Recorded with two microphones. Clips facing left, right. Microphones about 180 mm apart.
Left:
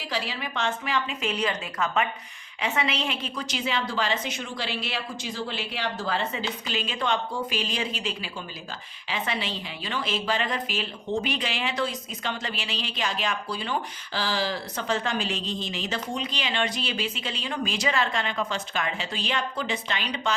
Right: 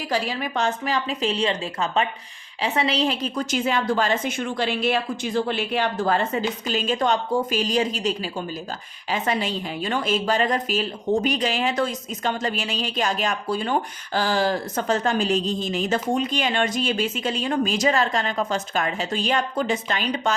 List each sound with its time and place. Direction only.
0.1 s a woman's voice: 45° right (ahead or behind)